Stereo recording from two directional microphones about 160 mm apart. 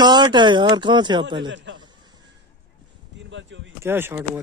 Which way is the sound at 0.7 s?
30° right (ahead or behind).